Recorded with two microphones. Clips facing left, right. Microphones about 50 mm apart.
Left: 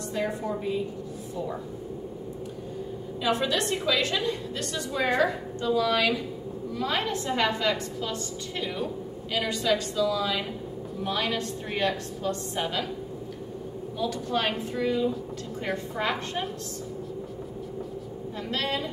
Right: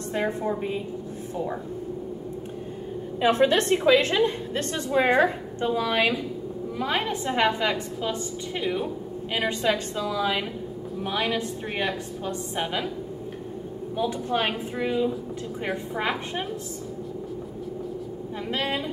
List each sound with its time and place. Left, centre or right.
0.1 s a woman's voice: right
3.2 s a woman's voice: right
11.0 s a woman's voice: centre
13.9 s a woman's voice: right
18.5 s a woman's voice: centre